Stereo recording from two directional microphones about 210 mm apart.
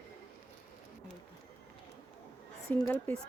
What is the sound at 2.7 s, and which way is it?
Speech, 10° left (ahead or behind).